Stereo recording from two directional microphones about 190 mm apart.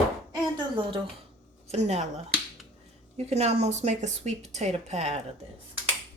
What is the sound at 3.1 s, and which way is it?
Speech, 35° right (ahead or behind).